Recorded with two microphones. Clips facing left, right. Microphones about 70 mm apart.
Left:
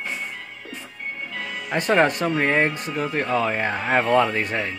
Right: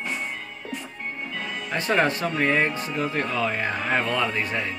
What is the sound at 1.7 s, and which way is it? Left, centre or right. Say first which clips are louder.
Speech: left 4 dB; left.